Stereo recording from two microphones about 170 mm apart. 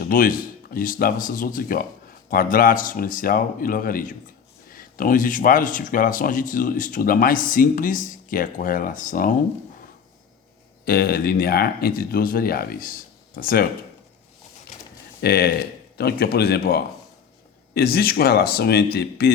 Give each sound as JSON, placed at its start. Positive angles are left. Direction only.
{"t": 0.0, "sound": "speech", "side_deg": 55}
{"t": 10.8, "sound": "speech", "side_deg": 65}
{"t": 15.2, "sound": "speech", "side_deg": 70}